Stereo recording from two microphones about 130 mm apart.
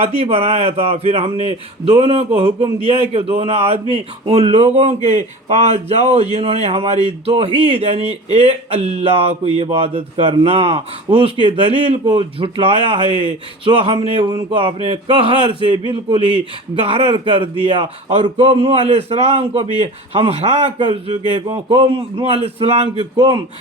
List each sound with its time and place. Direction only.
0.0 s a man's voice: 50° right (ahead or behind)
13.9 s a man's voice: 55° right (ahead or behind)
14.2 s a man's voice: 35° right (ahead or behind)